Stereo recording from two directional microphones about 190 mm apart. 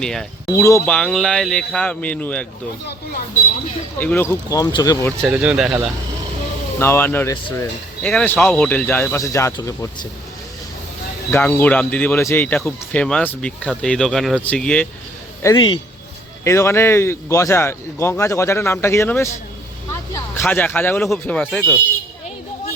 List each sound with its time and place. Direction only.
0.0 s a man's voice: 5° left (ahead or behind)
0.5 s speech: 15° left (ahead or behind)
0.9 s a man's voice: 5° left (ahead or behind)
3.9 s speech: 10° left (ahead or behind)
5.2 s a man's voice: 5° right (ahead or behind)
6.7 s speech: 10° left (ahead or behind)
11.3 s speech: 10° left (ahead or behind)
15.5 s speech: 25° left (ahead or behind)
16.4 s speech: 15° left (ahead or behind)